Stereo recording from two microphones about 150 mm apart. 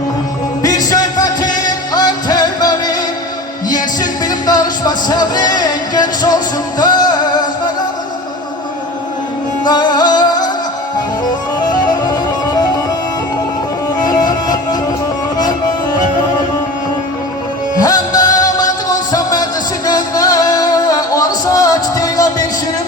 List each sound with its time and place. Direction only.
0.6 s music: 25° left (ahead or behind)
9.6 s music: 30° left (ahead or behind)
11.7 s music: 30° left (ahead or behind)
14.0 s music: 25° left (ahead or behind)
17.7 s music: 25° left (ahead or behind)